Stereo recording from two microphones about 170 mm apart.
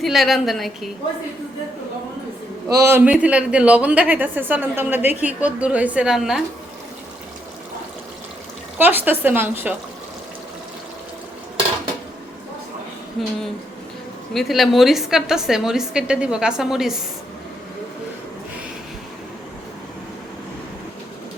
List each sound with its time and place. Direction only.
0.0 s a woman's voice: centre (ahead or behind)
2.6 s a man's voice: 20° right (ahead or behind)
3.0 s a woman's voice: 10° right (ahead or behind)
8.8 s a woman's voice: 10° right (ahead or behind)
13.2 s a woman's voice: centre (ahead or behind)
14.3 s a woman's voice: centre (ahead or behind)